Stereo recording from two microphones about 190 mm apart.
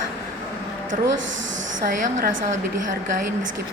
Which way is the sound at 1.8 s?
45° right (ahead or behind).